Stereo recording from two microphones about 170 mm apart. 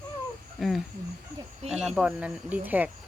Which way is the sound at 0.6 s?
Centre (ahead or behind).